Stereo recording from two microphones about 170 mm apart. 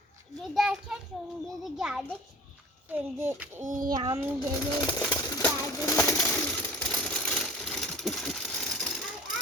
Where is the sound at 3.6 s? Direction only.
50° right (ahead or behind).